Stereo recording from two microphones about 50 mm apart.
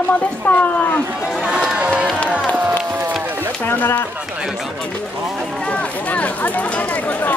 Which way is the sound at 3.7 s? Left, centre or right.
Left.